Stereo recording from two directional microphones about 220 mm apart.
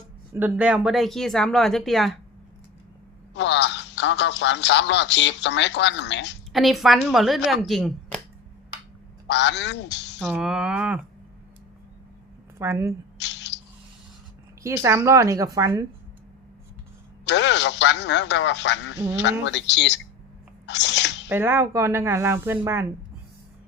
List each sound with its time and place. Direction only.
0.3 s speech: 5° right (ahead or behind)
3.3 s speech: 55° left (ahead or behind)
6.5 s speech: centre (ahead or behind)
9.2 s a man's voice: 55° left (ahead or behind)
10.2 s speech: centre (ahead or behind)
12.5 s speech: 10° right (ahead or behind)
13.1 s a sound: 50° left (ahead or behind)
14.6 s speech: 10° right (ahead or behind)
17.2 s speech: 55° left (ahead or behind)
20.7 s sneeze: 50° left (ahead or behind)
21.2 s speech: 10° right (ahead or behind)